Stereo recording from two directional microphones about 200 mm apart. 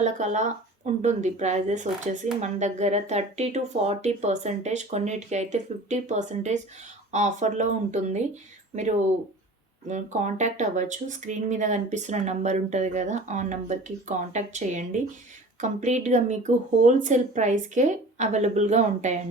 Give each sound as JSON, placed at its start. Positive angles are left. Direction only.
{"t": 0.0, "sound": "speech", "side_deg": -35}